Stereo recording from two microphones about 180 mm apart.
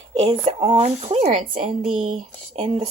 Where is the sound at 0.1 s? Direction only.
35° right (ahead or behind).